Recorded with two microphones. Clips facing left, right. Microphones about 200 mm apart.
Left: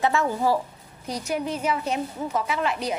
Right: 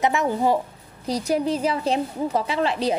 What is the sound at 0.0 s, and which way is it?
Speech, 20° right (ahead or behind).